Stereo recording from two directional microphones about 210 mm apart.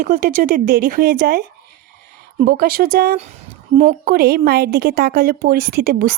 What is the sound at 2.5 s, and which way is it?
Speech, 45° right (ahead or behind).